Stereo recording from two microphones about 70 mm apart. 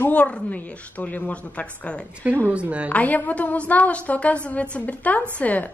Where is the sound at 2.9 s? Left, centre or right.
Left.